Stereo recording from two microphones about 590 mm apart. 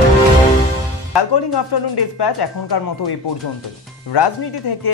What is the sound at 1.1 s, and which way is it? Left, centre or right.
Speech, left.